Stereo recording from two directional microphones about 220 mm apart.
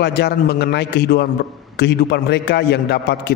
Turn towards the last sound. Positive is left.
turn(degrees=50)  # may be behind; listen again after turning